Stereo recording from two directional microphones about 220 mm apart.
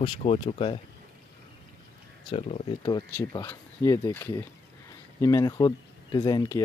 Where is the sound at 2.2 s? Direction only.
30° left (ahead or behind).